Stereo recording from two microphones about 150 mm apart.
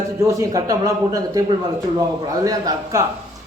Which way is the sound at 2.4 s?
20° right (ahead or behind).